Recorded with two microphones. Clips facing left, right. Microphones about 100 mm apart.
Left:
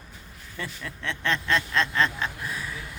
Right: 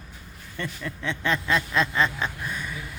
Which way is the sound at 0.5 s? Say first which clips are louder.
Right 3 dB; centre (ahead or behind).